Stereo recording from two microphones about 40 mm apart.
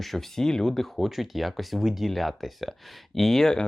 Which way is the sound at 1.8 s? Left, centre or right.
Centre.